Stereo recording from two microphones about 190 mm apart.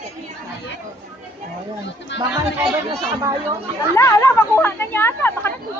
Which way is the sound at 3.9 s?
15° left (ahead or behind).